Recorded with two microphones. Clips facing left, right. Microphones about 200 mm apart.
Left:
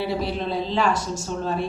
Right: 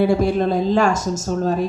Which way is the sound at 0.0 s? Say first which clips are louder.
Right 9 dB; 50° right (ahead or behind).